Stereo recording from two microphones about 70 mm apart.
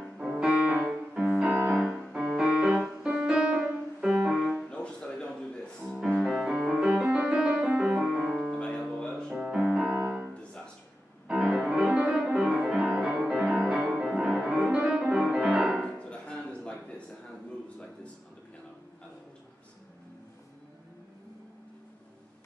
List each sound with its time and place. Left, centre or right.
0.2 s music: centre
1.9 s music: centre
2.5 s keyboard: right
3.1 s music: centre
4.6 s music: centre
5.9 s music: centre
6.5 s keyboard: centre
6.8 s piano: centre
8.3 s music: centre
9.3 s music: centre
9.7 s music: centre
11.5 s music: centre
14.5 s music: centre
15.7 s music: centre